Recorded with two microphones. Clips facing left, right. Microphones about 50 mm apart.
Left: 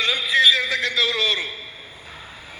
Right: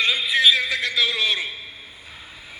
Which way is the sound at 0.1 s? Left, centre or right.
Left.